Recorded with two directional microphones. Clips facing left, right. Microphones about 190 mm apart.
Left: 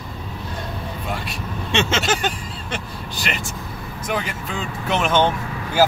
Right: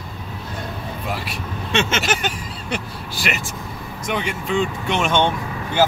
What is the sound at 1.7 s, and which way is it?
Speech, 30° left (ahead or behind).